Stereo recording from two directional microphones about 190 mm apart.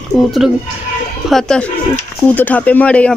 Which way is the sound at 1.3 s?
5° left (ahead or behind).